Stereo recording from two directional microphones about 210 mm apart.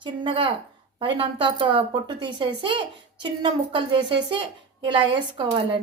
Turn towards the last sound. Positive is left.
turn(degrees=-25)  # may be behind; listen again after turning